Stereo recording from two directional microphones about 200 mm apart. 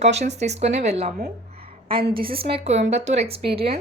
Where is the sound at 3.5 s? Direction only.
55° right (ahead or behind).